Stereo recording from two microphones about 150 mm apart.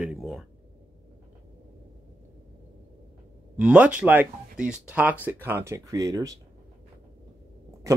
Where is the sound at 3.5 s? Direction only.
10° right (ahead or behind); by 6.3 s 25° right (ahead or behind).